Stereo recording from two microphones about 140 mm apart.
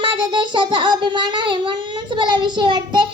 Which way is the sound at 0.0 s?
35° right (ahead or behind).